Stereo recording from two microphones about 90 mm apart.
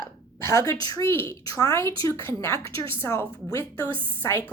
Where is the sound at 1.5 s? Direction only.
40° left (ahead or behind).